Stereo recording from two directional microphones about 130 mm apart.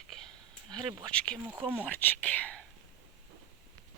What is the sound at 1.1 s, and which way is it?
Speech, 5° left (ahead or behind).